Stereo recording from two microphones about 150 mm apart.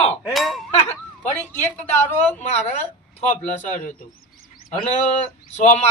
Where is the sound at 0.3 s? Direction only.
Centre (ahead or behind).